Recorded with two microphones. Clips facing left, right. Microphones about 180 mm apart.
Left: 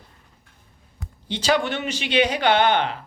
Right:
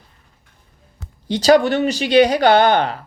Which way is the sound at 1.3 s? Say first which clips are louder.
Right 9 dB; 40° right (ahead or behind).